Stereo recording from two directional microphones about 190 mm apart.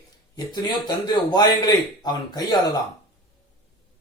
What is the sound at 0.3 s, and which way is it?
A man's voice, 20° left (ahead or behind).